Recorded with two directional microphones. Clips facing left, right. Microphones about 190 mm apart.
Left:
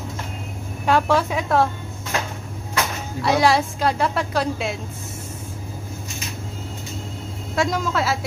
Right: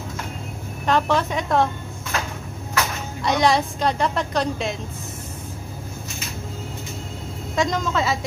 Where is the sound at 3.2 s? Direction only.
5° left (ahead or behind).